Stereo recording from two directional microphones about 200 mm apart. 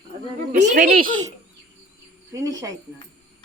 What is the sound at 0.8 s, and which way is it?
Speech, 50° right (ahead or behind).